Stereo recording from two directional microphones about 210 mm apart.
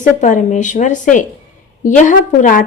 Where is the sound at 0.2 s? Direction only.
35° left (ahead or behind).